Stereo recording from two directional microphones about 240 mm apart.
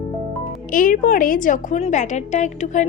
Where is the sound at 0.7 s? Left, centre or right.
Left.